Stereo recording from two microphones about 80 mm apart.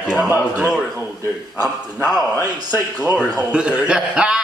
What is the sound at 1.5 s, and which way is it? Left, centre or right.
Speech, centre.